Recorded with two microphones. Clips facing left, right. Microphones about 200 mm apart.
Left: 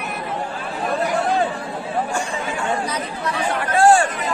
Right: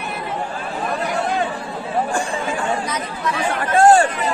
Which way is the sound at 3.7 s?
40° right (ahead or behind).